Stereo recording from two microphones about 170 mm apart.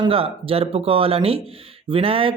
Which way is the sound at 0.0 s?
35° right (ahead or behind).